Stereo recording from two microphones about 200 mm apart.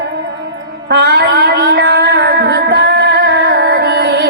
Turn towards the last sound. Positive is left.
turn(degrees=-55)  # may be behind; listen again after turning